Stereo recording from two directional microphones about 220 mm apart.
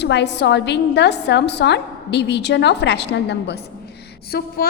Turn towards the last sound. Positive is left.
turn(degrees=45)  # may be behind; listen again after turning